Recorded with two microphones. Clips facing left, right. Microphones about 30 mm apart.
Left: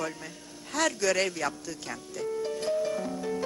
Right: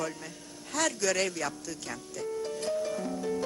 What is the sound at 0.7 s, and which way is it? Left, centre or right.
Music, centre.